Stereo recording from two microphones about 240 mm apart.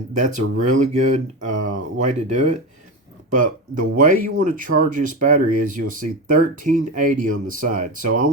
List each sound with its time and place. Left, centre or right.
0.2 s speech: right